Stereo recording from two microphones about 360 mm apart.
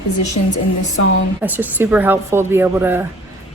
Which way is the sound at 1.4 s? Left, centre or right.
Centre.